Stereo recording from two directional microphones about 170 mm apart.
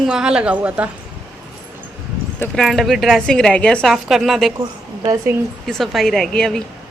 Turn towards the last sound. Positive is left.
turn(degrees=5)  # may be behind; listen again after turning